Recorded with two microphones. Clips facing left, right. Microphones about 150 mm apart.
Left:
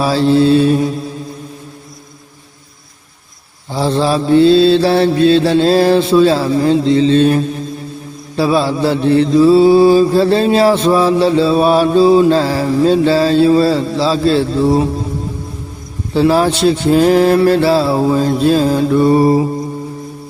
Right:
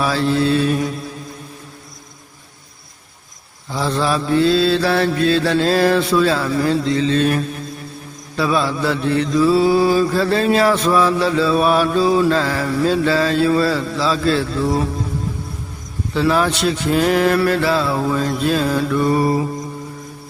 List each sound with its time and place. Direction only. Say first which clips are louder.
0.0 s mantra: left 6 dB; 30° left (ahead or behind)
3.7 s mantra: left 5 dB; 30° left (ahead or behind)
16.1 s speech: left 5 dB; 30° left (ahead or behind)